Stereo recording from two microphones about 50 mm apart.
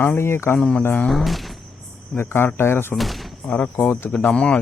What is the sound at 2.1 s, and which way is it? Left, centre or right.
Speech, left.